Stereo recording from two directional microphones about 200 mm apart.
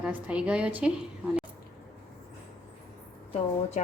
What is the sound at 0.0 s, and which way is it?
Speech, 5° right (ahead or behind).